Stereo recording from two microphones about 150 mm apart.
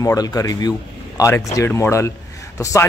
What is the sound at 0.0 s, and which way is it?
Speech, 25° left (ahead or behind).